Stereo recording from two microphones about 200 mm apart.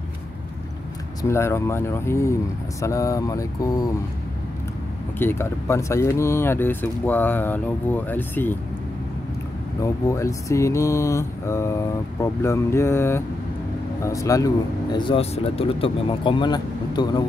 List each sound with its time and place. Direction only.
1.2 s speech: 15° left (ahead or behind)
5.2 s speech: 10° left (ahead or behind)
9.8 s speech: 15° left (ahead or behind)